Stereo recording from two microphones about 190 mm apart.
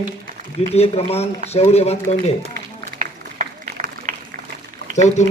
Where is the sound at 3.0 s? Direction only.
40° right (ahead or behind).